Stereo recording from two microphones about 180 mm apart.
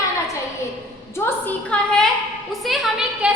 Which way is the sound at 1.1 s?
15° left (ahead or behind).